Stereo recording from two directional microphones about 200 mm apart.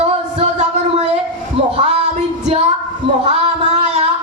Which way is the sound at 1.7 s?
35° right (ahead or behind).